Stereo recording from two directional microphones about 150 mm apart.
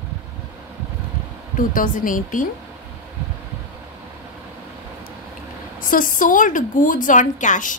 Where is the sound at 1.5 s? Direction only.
65° left (ahead or behind).